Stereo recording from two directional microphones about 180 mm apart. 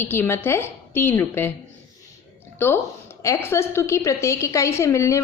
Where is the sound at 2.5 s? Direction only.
10° left (ahead or behind).